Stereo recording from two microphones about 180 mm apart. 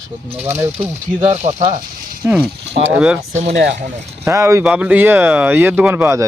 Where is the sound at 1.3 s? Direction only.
40° right (ahead or behind).